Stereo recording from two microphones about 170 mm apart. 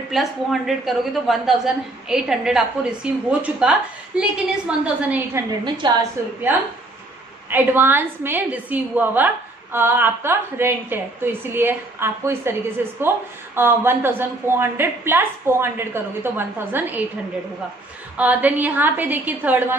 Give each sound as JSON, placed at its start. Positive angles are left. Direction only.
{"t": 0.1, "sound": "a woman's voice", "side_deg": 0}
{"t": 5.8, "sound": "a woman's voice", "side_deg": -25}
{"t": 7.4, "sound": "a woman's voice", "side_deg": -10}
{"t": 18.1, "sound": "a woman's voice", "side_deg": -10}